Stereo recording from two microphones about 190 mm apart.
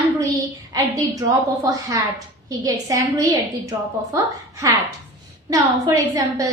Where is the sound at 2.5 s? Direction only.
20° right (ahead or behind).